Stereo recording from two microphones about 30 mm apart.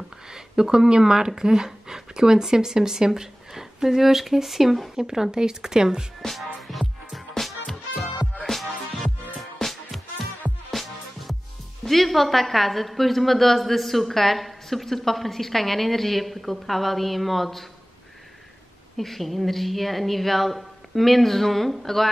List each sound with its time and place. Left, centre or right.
0.3 s speech: right
6.2 s music: centre
8.5 s music: centre
11.8 s a woman's voice: centre
18.9 s a woman's voice: centre